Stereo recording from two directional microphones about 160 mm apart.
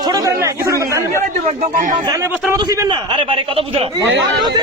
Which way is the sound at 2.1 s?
20° right (ahead or behind).